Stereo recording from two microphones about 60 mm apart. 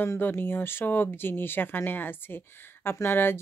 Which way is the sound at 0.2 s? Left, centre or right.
Left.